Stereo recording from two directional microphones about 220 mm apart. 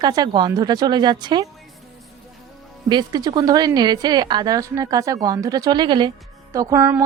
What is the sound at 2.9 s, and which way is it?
A woman's voice, 20° right (ahead or behind).